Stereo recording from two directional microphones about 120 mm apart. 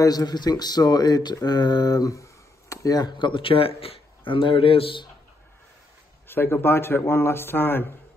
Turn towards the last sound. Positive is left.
turn(degrees=20)  # may be behind; listen again after turning